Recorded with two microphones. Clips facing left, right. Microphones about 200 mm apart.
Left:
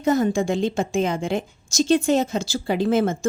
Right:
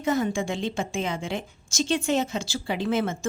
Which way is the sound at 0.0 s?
40° left (ahead or behind).